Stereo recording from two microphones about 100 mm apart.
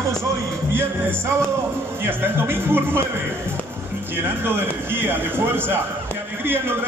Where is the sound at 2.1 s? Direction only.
20° right (ahead or behind).